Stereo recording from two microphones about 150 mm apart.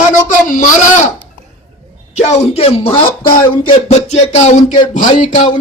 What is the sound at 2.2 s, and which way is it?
Speech, 45° left (ahead or behind).